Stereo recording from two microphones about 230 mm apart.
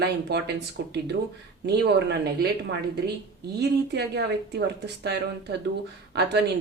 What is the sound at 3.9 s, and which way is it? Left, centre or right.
Speech, right.